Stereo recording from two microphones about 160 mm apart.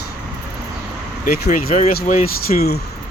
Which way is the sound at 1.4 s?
55° left (ahead or behind).